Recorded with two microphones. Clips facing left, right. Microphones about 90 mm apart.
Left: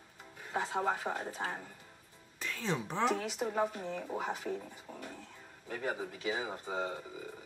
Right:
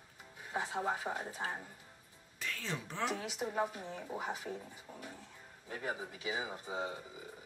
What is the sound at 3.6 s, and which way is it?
Speech, 10° right (ahead or behind).